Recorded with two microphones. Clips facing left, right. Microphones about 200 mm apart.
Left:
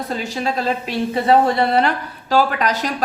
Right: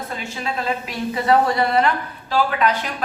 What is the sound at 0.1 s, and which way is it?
A woman's voice, 35° left (ahead or behind).